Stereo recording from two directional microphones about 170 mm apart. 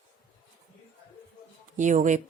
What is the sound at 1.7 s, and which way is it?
Speech, 45° right (ahead or behind).